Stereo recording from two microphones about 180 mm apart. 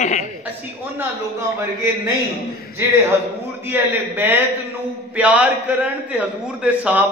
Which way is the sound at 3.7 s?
10° right (ahead or behind).